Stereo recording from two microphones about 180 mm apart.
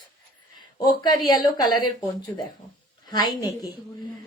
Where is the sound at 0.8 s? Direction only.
25° left (ahead or behind).